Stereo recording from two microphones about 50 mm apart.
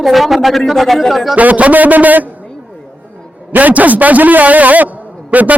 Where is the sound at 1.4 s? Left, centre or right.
Right.